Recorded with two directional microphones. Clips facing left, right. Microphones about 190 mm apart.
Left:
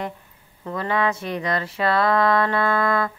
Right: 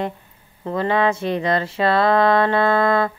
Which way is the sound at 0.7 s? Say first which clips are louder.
Right 4 dB; 25° right (ahead or behind).